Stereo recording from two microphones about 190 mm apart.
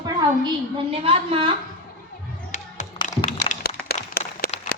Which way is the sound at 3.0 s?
25° left (ahead or behind).